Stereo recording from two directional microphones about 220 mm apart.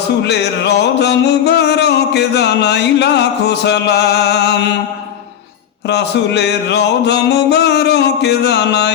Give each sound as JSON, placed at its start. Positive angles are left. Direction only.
{"t": 0.2, "sound": "music", "side_deg": 50}
{"t": 5.9, "sound": "music", "side_deg": 50}